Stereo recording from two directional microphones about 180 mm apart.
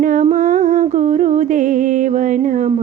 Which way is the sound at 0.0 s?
45° right (ahead or behind).